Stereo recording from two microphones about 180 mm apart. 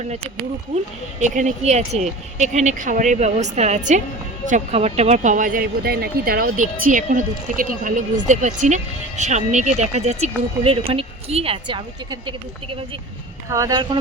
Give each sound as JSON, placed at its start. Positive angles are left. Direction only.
{"t": 1.2, "sound": "speech", "side_deg": -40}
{"t": 13.5, "sound": "speech", "side_deg": -20}